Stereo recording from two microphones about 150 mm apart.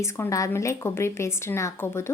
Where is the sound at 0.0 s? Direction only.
20° left (ahead or behind).